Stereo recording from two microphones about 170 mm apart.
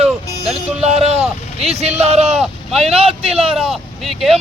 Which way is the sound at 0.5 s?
40° right (ahead or behind).